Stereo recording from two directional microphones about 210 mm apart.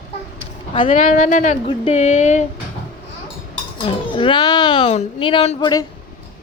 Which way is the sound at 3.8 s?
25° left (ahead or behind).